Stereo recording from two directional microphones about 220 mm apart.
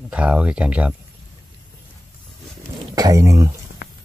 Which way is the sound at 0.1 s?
5° right (ahead or behind).